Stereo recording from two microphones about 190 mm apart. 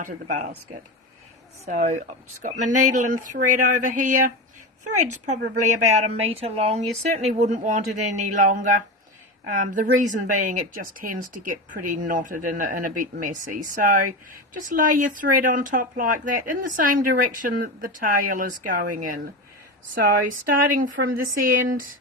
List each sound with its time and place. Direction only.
0.0 s speech: 40° right (ahead or behind)
1.6 s speech: 35° right (ahead or behind)
21.2 s speech: 45° right (ahead or behind)